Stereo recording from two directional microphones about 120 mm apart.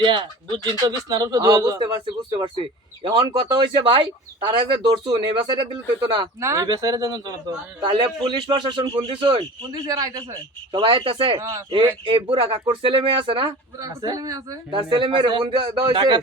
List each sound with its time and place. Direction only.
0.0 s speech: 45° right (ahead or behind)
2.3 s speech: 45° right (ahead or behind)
10.7 s speech: 45° right (ahead or behind)
11.3 s a man's voice: 25° right (ahead or behind)
12.0 s speech: 45° right (ahead or behind)
13.7 s a man's voice: 30° right (ahead or behind)
14.7 s speech: 45° right (ahead or behind)